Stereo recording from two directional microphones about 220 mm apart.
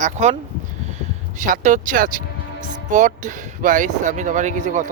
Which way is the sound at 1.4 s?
35° right (ahead or behind).